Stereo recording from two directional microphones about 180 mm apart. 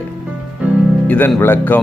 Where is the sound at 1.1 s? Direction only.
10° left (ahead or behind).